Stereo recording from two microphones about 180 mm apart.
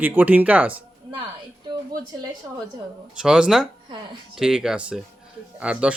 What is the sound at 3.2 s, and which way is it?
Speech, 5° right (ahead or behind).